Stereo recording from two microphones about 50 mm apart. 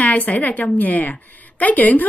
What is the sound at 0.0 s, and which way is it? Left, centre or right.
A woman's voice, left.